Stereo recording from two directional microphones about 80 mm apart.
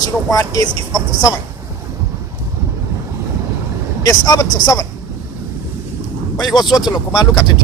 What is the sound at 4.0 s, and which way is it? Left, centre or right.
Speech, left.